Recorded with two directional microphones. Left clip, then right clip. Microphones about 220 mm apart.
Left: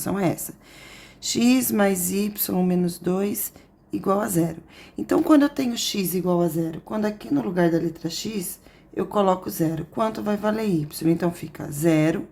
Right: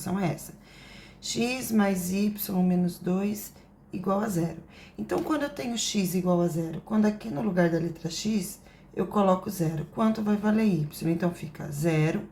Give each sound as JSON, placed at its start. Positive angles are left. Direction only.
{"t": 0.0, "sound": "speech", "side_deg": 45}